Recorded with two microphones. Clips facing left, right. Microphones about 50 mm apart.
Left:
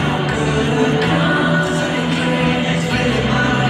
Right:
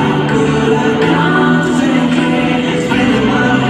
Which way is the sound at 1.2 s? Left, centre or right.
Right.